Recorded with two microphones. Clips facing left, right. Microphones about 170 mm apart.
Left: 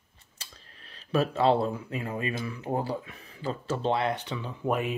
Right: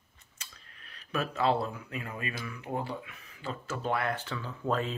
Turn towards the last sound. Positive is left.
turn(degrees=15)  # may be behind; listen again after turning